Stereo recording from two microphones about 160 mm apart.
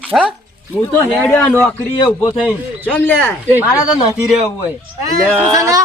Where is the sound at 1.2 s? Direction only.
10° left (ahead or behind).